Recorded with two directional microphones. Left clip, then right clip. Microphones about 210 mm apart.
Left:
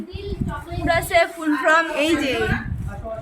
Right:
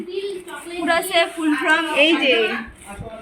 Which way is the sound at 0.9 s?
50° left (ahead or behind).